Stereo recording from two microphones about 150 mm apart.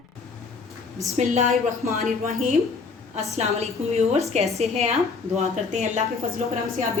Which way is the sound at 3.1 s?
45° right (ahead or behind).